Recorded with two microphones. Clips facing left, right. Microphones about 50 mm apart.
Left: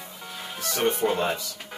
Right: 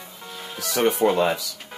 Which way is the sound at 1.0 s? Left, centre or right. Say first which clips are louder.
Right 5 dB; right.